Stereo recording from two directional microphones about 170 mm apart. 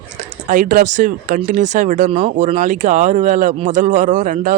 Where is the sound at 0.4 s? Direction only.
50° right (ahead or behind).